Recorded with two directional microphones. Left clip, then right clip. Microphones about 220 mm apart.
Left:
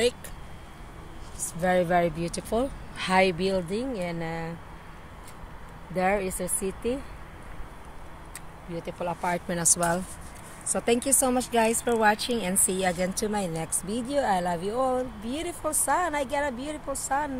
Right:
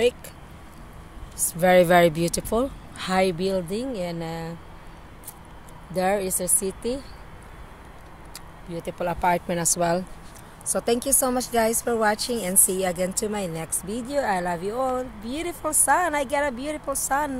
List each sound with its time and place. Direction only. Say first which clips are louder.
1.5 s speech: right 7 dB; 50° right (ahead or behind)
2.5 s speech: right 3 dB; 20° right (ahead or behind)
5.9 s speech: right 2 dB; 10° right (ahead or behind)
8.9 s speech: right 6 dB; 45° right (ahead or behind)
9.5 s speech: right 3 dB; 15° right (ahead or behind); by 17.3 s 45° right (ahead or behind)